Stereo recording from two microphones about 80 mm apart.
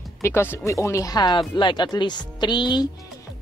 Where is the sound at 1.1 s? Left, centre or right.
Left.